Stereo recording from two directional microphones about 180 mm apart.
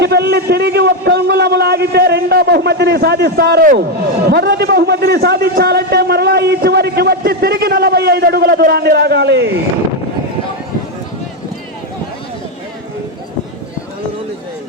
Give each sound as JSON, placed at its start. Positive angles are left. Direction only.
{"t": 0.0, "sound": "a man's voice", "side_deg": -65}